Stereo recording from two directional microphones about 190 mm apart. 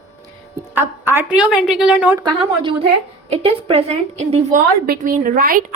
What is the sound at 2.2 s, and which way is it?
A woman's voice, 25° right (ahead or behind).